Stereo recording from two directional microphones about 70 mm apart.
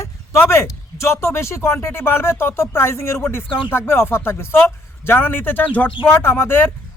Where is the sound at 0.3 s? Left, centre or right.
Left.